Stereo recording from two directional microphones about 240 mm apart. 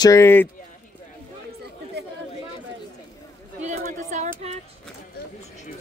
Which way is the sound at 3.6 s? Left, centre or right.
Right.